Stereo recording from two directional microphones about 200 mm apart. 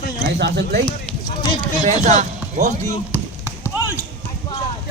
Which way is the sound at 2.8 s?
15° left (ahead or behind).